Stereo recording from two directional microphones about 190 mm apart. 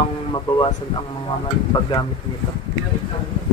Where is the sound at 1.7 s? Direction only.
25° left (ahead or behind).